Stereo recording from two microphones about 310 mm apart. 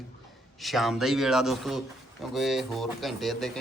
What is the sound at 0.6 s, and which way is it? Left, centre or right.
Speech, centre.